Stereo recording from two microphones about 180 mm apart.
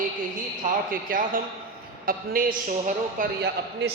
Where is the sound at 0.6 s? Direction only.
50° right (ahead or behind).